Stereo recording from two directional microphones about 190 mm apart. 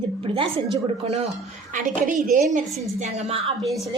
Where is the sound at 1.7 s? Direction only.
45° right (ahead or behind).